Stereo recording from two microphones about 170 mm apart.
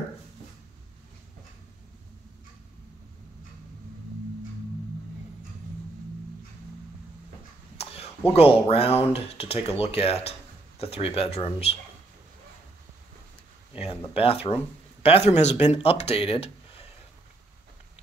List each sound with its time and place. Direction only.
7.7 s a sound: 35° left (ahead or behind)
8.3 s speech: 35° left (ahead or behind)
14.1 s speech: 35° left (ahead or behind)